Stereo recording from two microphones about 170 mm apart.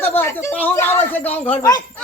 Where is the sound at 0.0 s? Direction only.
10° left (ahead or behind).